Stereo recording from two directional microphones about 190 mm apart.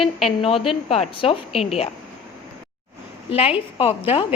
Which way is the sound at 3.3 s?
30° left (ahead or behind).